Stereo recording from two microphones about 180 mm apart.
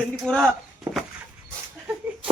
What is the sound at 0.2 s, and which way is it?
Speech, centre (ahead or behind).